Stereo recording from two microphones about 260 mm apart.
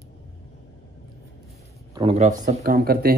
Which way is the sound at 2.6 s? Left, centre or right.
Right.